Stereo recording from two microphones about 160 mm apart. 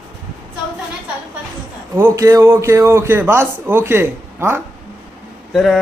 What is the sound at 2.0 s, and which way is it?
A man's voice, 15° right (ahead or behind).